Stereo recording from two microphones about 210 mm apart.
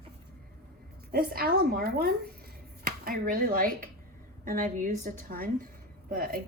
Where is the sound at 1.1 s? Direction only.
45° right (ahead or behind).